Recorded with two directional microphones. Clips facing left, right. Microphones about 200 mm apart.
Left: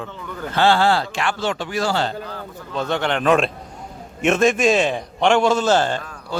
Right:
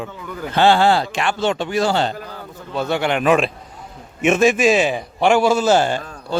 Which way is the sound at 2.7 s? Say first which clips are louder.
Right 2 dB; 10° right (ahead or behind).